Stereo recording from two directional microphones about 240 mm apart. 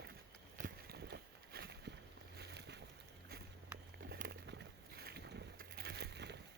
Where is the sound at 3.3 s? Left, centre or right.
Right.